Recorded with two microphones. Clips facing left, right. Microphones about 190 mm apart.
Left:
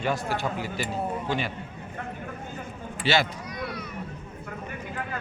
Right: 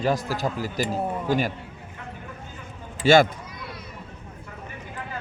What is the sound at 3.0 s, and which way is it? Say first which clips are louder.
Speech: right 8 dB; 45° right (ahead or behind).